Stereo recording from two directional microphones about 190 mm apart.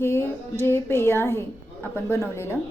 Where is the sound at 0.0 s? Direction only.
15° left (ahead or behind).